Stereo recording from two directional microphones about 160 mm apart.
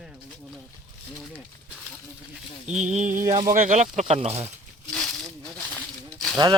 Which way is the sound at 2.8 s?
45° right (ahead or behind).